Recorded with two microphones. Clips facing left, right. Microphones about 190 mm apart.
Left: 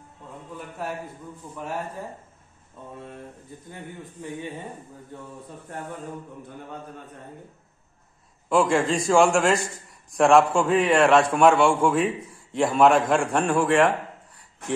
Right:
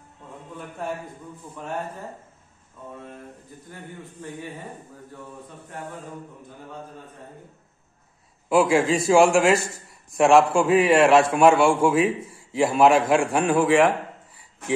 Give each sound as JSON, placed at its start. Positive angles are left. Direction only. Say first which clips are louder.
{"t": 0.6, "sound": "a man's voice", "louder": "right 2 dB", "side_deg": 5}
{"t": 3.7, "sound": "speech", "louder": "even", "side_deg": 20}
{"t": 8.5, "sound": "a man's voice", "louder": "right 2 dB", "side_deg": -5}